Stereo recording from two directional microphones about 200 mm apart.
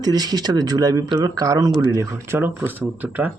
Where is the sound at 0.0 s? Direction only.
20° right (ahead or behind).